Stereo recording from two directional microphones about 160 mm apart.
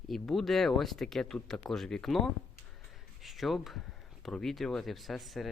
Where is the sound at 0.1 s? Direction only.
Centre (ahead or behind).